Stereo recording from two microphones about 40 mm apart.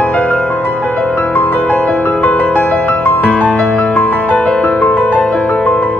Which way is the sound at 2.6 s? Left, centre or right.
Left.